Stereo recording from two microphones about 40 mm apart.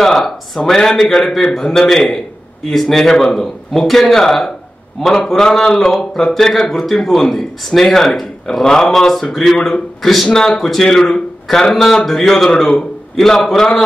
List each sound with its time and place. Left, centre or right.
0.0 s a man's voice: centre